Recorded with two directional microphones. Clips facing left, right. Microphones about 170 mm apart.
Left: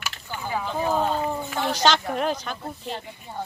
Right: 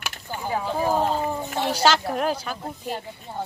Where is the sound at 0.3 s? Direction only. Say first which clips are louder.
Right 2 dB; 35° right (ahead or behind).